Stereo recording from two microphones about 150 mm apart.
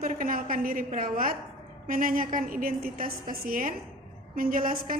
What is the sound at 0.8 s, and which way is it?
A woman's voice, 65° right (ahead or behind).